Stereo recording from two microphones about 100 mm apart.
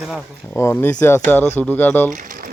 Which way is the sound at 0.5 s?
25° left (ahead or behind).